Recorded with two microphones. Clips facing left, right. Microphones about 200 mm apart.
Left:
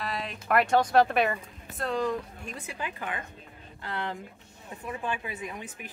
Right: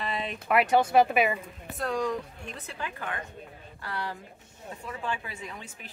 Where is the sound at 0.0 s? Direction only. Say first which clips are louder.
Right 2 dB; centre (ahead or behind).